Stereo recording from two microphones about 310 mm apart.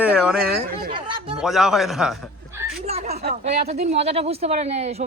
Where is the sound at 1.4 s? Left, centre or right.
Centre.